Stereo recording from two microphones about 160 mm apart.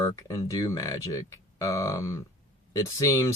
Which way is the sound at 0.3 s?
20° left (ahead or behind).